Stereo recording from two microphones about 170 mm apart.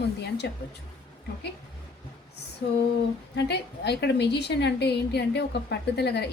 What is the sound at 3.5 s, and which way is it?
A woman's voice, 75° left (ahead or behind).